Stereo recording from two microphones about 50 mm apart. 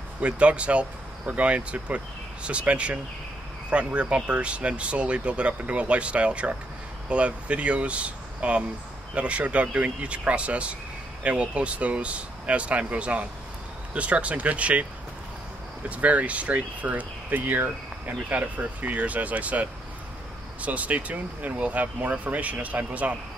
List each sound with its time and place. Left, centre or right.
0.2 s speech: right
16.0 s speech: right